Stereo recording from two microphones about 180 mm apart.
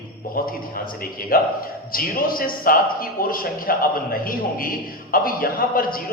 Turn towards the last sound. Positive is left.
turn(degrees=55)  # may be behind; listen again after turning